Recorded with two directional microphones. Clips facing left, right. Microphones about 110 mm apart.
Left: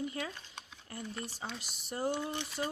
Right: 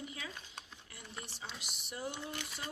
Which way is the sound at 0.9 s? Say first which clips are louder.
Left 8 dB; 45° left (ahead or behind).